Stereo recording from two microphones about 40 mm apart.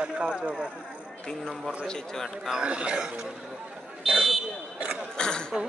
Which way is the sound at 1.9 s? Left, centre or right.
Centre.